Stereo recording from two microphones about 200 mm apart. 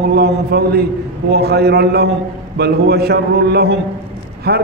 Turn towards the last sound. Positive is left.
turn(degrees=-50)  # may be behind; listen again after turning